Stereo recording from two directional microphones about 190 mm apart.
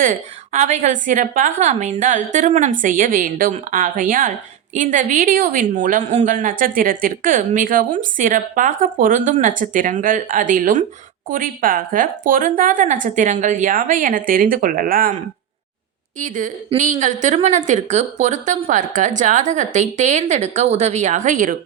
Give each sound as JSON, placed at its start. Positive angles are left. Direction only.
{"t": 0.0, "sound": "a woman's voice", "side_deg": -40}
{"t": 16.2, "sound": "a woman's voice", "side_deg": -40}